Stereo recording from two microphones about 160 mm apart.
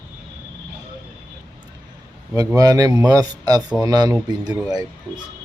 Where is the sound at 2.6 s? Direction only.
25° right (ahead or behind).